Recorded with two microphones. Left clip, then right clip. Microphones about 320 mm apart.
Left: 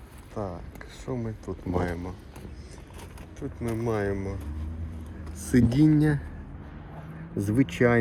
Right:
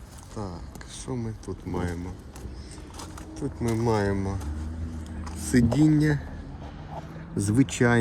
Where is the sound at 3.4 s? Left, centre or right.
Centre.